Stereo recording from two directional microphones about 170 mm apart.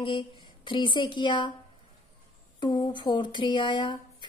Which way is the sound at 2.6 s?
25° left (ahead or behind).